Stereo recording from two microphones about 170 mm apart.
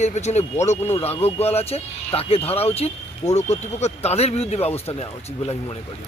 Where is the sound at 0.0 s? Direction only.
40° left (ahead or behind).